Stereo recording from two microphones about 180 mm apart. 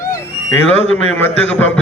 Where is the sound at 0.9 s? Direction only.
10° left (ahead or behind).